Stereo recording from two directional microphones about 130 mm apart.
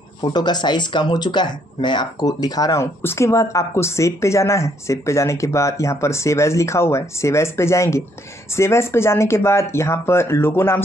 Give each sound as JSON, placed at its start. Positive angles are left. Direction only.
{"t": 0.2, "sound": "speech", "side_deg": 35}